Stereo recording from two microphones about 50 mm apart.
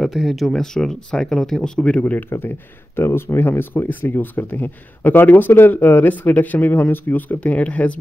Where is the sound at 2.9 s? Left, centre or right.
Left.